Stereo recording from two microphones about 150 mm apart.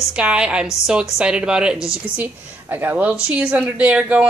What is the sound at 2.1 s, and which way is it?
A woman's voice, 10° right (ahead or behind).